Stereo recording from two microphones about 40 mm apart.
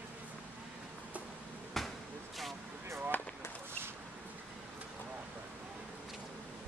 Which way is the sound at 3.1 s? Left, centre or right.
Left.